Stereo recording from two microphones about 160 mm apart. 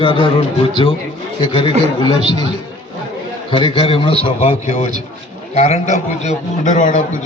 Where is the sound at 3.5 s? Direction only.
35° left (ahead or behind); by 7.0 s 50° left (ahead or behind).